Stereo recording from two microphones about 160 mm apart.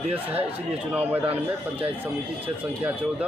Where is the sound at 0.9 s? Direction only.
10° right (ahead or behind).